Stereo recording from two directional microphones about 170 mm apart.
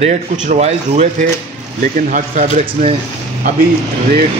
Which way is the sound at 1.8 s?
50° right (ahead or behind).